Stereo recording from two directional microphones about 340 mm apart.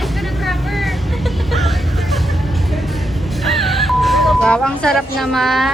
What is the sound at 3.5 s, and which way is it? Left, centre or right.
Music, centre.